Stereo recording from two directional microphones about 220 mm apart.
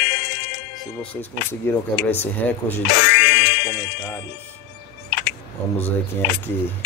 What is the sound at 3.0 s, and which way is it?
Music, 50° left (ahead or behind).